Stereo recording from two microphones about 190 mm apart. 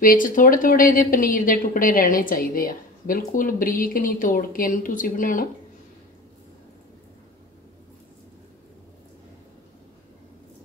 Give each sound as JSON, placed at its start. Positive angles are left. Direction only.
{"t": 0.0, "sound": "a woman's voice", "side_deg": 45}